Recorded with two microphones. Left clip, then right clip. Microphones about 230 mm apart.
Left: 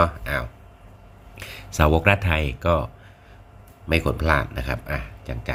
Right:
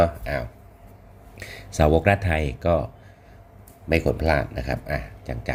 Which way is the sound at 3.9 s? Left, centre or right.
Centre.